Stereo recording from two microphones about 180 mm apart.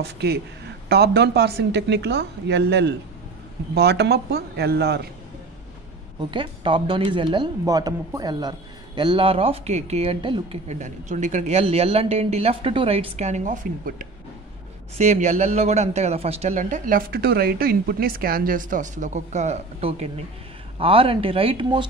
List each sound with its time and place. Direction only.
0.0 s a woman's voice: 65° right (ahead or behind)
6.3 s speech: 30° right (ahead or behind)